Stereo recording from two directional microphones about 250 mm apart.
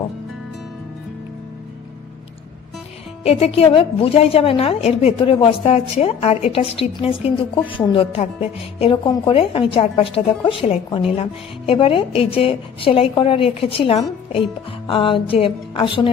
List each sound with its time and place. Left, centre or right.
3.2 s a woman's voice: left